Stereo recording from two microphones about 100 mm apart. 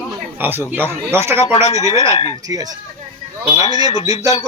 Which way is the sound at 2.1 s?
75° left (ahead or behind).